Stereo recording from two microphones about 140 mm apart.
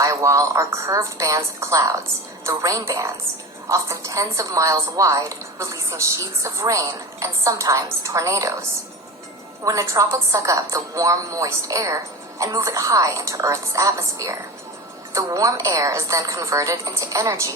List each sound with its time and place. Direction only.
0.0 s a woman's voice: 25° right (ahead or behind)
9.6 s a woman's voice: 25° right (ahead or behind)